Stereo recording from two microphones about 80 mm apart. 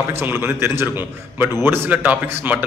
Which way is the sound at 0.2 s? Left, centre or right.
Right.